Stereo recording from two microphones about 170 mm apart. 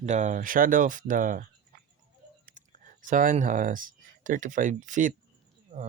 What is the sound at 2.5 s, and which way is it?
Speech, 50° right (ahead or behind).